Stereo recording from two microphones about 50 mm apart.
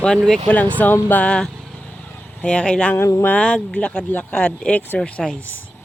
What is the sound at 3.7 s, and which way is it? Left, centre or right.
Speech, left.